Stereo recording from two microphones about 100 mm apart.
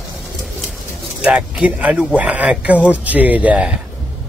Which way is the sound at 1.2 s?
10° right (ahead or behind).